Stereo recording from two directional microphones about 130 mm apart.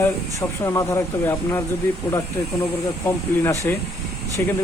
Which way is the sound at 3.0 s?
20° left (ahead or behind).